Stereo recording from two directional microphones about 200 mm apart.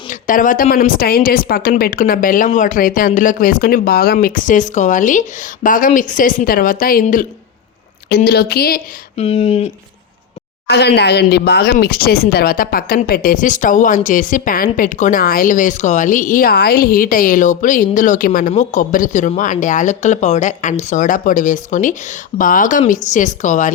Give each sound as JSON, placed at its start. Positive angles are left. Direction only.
{"t": 0.1, "sound": "a woman's voice", "side_deg": 40}
{"t": 9.1, "sound": "speech", "side_deg": 30}
{"t": 10.7, "sound": "speech", "side_deg": 55}